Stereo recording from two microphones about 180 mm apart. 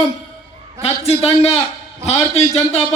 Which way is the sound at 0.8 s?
35° left (ahead or behind).